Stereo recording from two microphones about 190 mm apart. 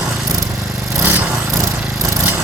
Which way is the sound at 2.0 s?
15° right (ahead or behind).